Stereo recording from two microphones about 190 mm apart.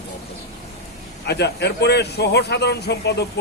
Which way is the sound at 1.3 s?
60° left (ahead or behind).